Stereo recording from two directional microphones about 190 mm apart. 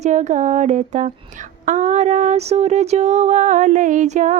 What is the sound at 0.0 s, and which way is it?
Mantra, 40° right (ahead or behind).